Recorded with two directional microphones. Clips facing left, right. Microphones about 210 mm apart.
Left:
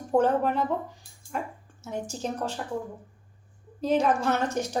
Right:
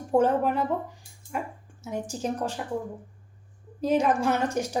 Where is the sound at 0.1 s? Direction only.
10° right (ahead or behind).